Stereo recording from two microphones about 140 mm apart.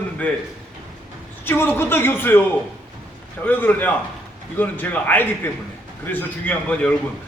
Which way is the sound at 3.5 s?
10° left (ahead or behind).